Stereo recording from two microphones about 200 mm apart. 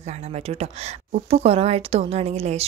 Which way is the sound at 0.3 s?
30° right (ahead or behind).